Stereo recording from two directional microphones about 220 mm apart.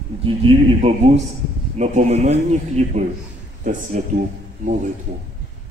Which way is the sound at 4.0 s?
35° right (ahead or behind).